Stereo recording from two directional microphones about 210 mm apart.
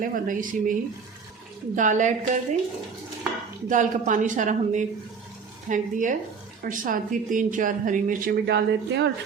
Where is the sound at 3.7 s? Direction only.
35° right (ahead or behind); by 9.1 s 55° right (ahead or behind).